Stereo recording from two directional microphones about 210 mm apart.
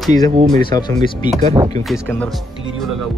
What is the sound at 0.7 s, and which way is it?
Speech, 20° left (ahead or behind).